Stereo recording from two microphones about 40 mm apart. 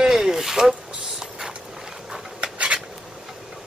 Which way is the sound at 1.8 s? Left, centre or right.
Centre.